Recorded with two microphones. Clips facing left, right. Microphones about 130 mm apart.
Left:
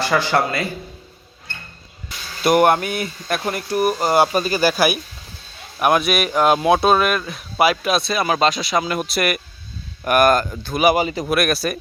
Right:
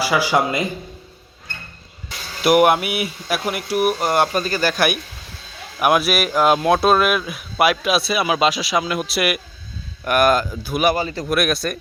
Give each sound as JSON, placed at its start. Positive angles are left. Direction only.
{"t": 0.0, "sound": "a man's voice", "side_deg": -10}
{"t": 2.4, "sound": "speech", "side_deg": -5}
{"t": 10.8, "sound": "a man's voice", "side_deg": 15}
{"t": 11.3, "sound": "speech", "side_deg": 0}